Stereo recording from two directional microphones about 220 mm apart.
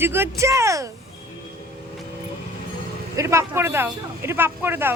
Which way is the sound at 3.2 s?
10° right (ahead or behind).